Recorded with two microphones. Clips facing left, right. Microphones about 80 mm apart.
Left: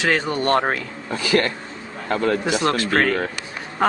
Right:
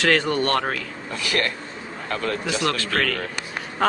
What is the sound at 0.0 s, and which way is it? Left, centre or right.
A man's voice, centre.